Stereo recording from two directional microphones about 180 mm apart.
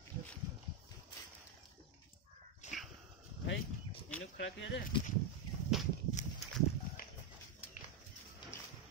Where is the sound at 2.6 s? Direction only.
40° left (ahead or behind).